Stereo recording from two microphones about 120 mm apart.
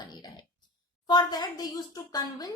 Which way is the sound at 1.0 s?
35° left (ahead or behind).